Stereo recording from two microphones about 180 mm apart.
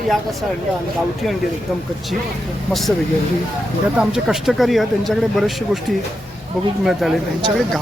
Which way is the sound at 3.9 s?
5° right (ahead or behind).